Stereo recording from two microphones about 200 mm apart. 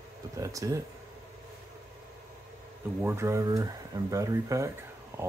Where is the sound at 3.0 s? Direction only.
10° right (ahead or behind).